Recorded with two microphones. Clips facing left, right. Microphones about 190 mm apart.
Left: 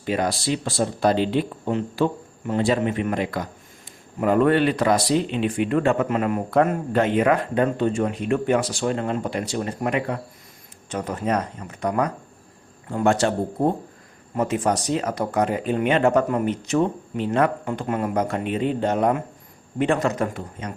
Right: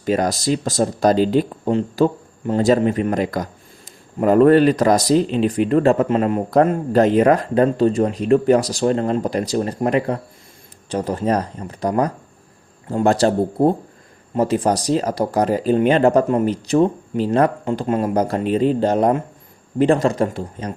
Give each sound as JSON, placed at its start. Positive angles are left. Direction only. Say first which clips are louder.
{"t": 0.0, "sound": "speech", "louder": "right 5 dB", "side_deg": -40}